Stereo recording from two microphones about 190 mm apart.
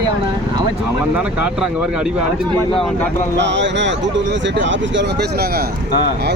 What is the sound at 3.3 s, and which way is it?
Speech, 70° right (ahead or behind).